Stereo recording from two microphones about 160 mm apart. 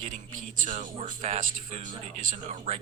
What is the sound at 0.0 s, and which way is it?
Speech, 55° right (ahead or behind).